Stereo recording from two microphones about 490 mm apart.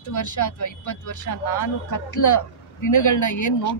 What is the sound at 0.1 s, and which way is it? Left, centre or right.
Speech, left.